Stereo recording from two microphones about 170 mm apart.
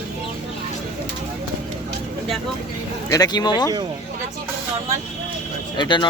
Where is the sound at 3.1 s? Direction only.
25° left (ahead or behind).